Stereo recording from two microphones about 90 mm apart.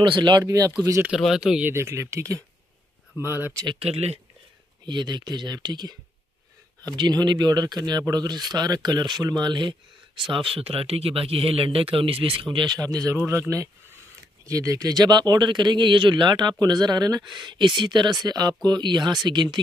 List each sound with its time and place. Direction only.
0.0 s speech: 65° right (ahead or behind)
0.4 s speech: 40° right (ahead or behind)
1.1 s speech: 5° right (ahead or behind)
1.6 s speech: 30° right (ahead or behind)
3.3 s speech: 20° right (ahead or behind)
3.9 s speech: 90° right
4.8 s speech: 55° right (ahead or behind)
10.2 s speech: 75° right (ahead or behind); by 18.1 s 55° right (ahead or behind)
18.2 s speech: 45° right (ahead or behind)